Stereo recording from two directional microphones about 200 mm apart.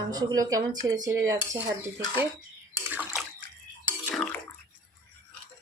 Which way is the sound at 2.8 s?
5° right (ahead or behind).